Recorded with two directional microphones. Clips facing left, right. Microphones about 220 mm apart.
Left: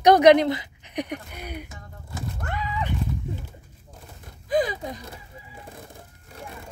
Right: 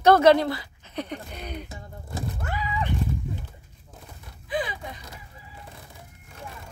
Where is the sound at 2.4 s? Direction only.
5° right (ahead or behind).